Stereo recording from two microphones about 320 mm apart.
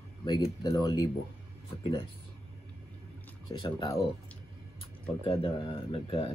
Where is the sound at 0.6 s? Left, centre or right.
Centre.